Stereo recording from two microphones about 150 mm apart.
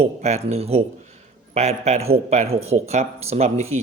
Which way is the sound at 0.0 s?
45° right (ahead or behind).